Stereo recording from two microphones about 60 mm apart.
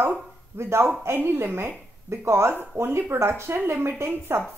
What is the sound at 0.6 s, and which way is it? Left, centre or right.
A woman's voice, right.